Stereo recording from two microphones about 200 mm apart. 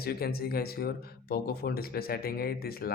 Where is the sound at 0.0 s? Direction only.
50° left (ahead or behind).